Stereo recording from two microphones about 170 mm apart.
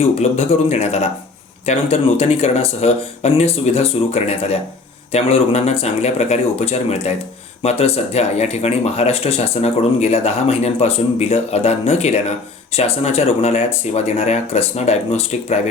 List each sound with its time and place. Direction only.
0.0 s speech: 35° left (ahead or behind)